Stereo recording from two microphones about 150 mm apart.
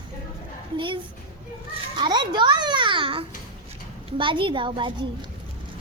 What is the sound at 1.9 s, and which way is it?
A child's voice, 30° right (ahead or behind).